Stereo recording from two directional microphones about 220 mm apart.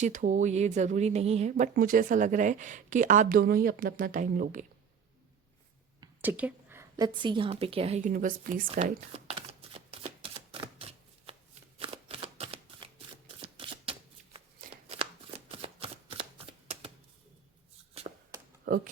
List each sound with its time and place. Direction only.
0.0 s speech: 35° right (ahead or behind)
6.2 s a woman's voice: 5° right (ahead or behind); by 8.6 s 40° right (ahead or behind)
8.6 s shuffling cards: 30° right (ahead or behind)
18.1 s a sound: 30° right (ahead or behind)